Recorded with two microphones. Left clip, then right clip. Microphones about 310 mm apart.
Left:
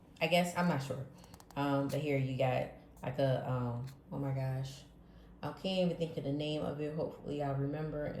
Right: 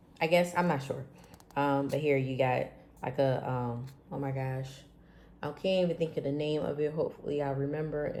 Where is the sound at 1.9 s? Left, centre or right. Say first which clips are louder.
Right 7 dB; centre.